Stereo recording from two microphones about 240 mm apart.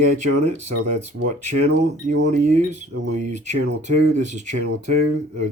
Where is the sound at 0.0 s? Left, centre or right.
Right.